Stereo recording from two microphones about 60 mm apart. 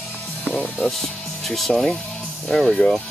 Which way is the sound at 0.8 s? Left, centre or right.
Centre.